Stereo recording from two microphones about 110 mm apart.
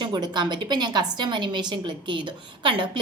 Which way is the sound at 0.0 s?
40° right (ahead or behind).